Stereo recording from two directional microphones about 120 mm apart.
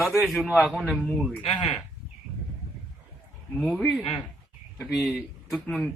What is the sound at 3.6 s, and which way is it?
A man's voice, 5° left (ahead or behind).